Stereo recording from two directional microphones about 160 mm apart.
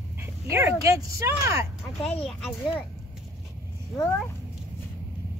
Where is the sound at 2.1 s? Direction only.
5° left (ahead or behind).